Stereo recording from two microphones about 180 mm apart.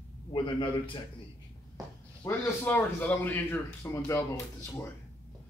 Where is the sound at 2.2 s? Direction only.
10° left (ahead or behind).